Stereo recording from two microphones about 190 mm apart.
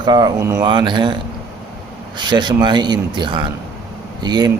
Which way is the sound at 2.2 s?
25° right (ahead or behind).